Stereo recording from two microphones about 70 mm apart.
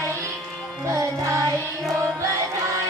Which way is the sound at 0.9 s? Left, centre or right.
Right.